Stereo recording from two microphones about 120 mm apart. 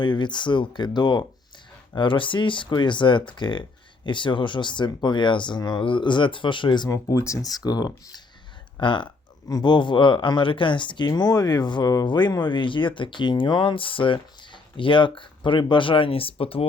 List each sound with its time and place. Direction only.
0.0 s speech: 40° left (ahead or behind)